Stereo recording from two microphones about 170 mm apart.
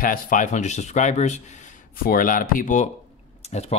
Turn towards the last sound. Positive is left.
turn(degrees=40)  # may be behind; listen again after turning